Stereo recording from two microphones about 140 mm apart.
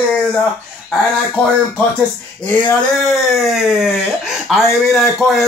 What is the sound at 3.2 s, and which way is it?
Speech, 5° right (ahead or behind).